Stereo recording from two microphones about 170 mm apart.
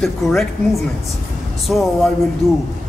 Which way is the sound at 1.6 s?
Centre (ahead or behind).